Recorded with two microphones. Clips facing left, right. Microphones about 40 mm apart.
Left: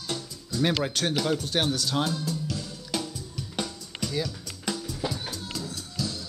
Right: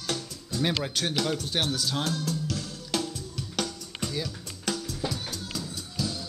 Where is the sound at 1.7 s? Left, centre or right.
Centre.